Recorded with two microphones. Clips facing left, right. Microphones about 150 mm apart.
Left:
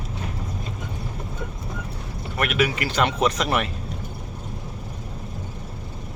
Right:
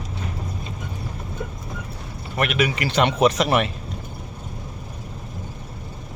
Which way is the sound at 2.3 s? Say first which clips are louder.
Right 1 dB; centre (ahead or behind).